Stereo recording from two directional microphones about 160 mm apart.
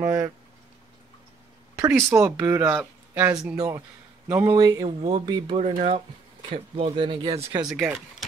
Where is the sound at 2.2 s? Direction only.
15° right (ahead or behind).